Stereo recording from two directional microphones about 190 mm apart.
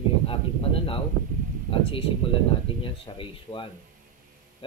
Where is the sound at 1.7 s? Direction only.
30° left (ahead or behind).